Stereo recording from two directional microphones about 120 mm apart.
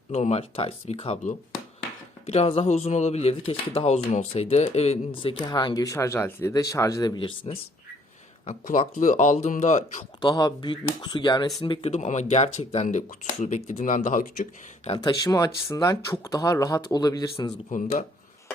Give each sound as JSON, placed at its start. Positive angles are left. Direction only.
{"t": 0.1, "sound": "speech", "side_deg": 65}
{"t": 5.2, "sound": "speech", "side_deg": 40}
{"t": 7.2, "sound": "speech", "side_deg": 45}
{"t": 8.4, "sound": "speech", "side_deg": 90}
{"t": 10.2, "sound": "speech", "side_deg": 35}
{"t": 11.9, "sound": "speech", "side_deg": 70}
{"t": 14.9, "sound": "speech", "side_deg": 35}
{"t": 17.7, "sound": "speech", "side_deg": 90}